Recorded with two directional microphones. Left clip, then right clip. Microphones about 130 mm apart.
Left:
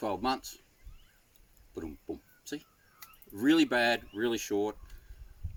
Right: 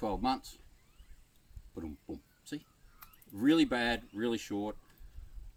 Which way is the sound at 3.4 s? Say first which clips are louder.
Left 3 dB; 20° right (ahead or behind).